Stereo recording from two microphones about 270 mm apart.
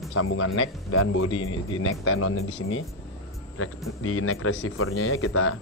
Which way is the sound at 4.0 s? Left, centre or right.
Left.